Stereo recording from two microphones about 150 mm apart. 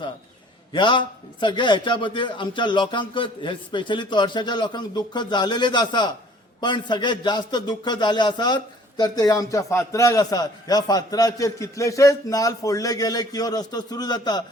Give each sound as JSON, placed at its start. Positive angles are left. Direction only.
{"t": 0.7, "sound": "a man's voice", "side_deg": 30}